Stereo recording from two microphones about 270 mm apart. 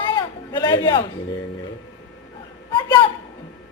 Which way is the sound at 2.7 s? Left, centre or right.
Centre.